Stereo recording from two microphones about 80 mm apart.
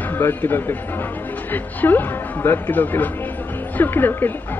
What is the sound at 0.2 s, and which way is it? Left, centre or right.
A woman's voice, left.